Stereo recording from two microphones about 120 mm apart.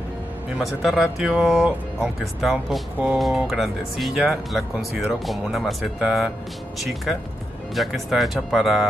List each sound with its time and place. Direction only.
0.6 s speech: centre (ahead or behind)